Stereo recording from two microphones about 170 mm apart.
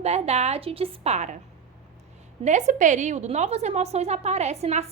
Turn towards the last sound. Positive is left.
turn(degrees=-40)  # may be behind; listen again after turning